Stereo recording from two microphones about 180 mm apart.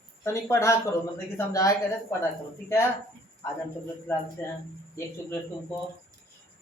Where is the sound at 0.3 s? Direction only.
15° left (ahead or behind).